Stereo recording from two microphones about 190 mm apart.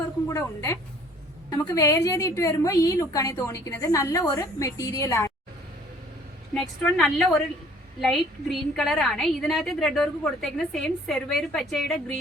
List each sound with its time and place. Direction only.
0.3 s a woman's voice: 15° left (ahead or behind)
6.5 s a woman's voice: 5° left (ahead or behind)